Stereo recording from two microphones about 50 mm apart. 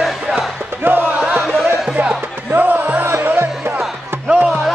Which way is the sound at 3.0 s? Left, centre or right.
Right.